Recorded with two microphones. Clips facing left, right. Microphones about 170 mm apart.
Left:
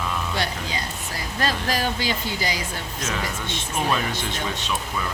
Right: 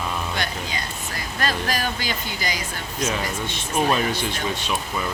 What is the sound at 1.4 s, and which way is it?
Speech, 25° left (ahead or behind).